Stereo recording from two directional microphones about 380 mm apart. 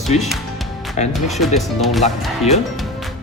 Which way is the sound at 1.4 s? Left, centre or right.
Centre.